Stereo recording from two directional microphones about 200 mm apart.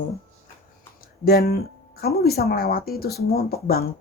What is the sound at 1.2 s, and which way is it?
Speech, 50° left (ahead or behind).